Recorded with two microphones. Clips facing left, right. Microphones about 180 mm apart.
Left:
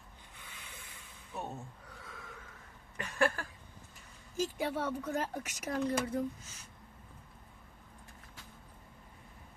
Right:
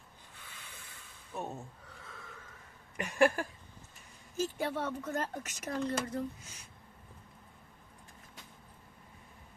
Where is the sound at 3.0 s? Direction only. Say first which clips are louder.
Right 4 dB; 15° right (ahead or behind).